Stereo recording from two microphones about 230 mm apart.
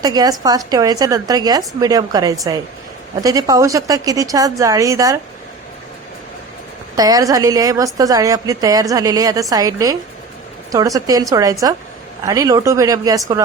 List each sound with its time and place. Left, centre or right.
0.0 s speech: centre
6.9 s speech: centre